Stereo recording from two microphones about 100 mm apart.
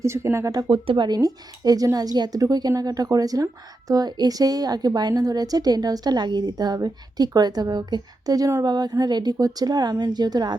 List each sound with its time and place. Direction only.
0.0 s speech: 30° right (ahead or behind)
0.7 s a woman's voice: 55° right (ahead or behind)